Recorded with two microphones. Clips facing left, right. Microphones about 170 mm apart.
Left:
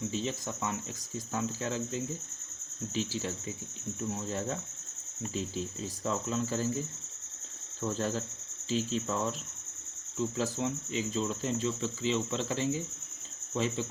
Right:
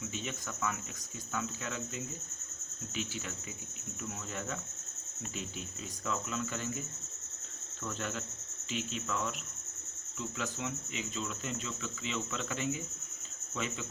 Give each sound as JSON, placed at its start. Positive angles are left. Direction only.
{"t": 0.1, "sound": "speech", "side_deg": 30}